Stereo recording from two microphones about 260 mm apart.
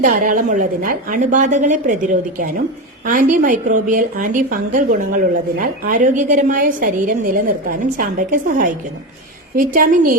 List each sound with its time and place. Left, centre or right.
0.0 s a woman's voice: right